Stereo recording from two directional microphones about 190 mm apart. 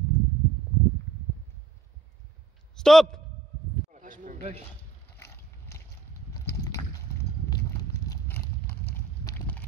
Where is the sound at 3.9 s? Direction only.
45° right (ahead or behind).